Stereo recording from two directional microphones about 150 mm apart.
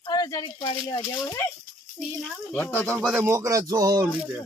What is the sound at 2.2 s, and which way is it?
Speech, 5° left (ahead or behind).